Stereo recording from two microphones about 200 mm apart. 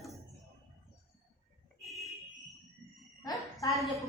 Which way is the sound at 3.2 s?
15° left (ahead or behind).